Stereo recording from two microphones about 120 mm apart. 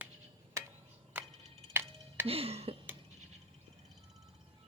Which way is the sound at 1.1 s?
15° right (ahead or behind).